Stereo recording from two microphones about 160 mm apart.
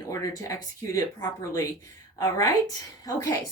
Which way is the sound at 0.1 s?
20° left (ahead or behind).